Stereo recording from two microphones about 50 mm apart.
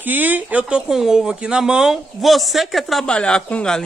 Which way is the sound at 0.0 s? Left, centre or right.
Right.